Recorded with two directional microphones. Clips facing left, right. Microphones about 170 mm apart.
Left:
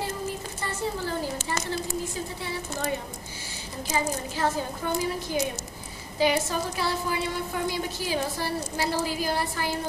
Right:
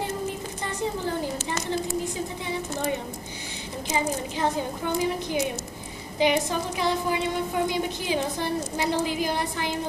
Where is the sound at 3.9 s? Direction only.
20° right (ahead or behind).